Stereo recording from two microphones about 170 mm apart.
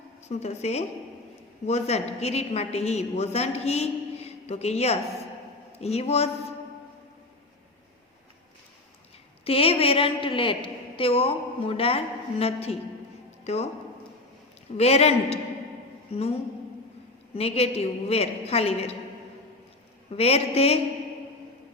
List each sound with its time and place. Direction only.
0.3 s a woman's voice: 40° left (ahead or behind)
9.4 s a woman's voice: 35° left (ahead or behind)
14.8 s a woman's voice: 40° left (ahead or behind)
17.3 s a woman's voice: 35° left (ahead or behind)
20.1 s a woman's voice: 35° left (ahead or behind)